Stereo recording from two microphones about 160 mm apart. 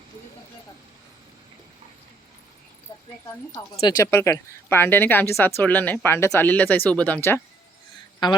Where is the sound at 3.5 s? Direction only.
25° left (ahead or behind).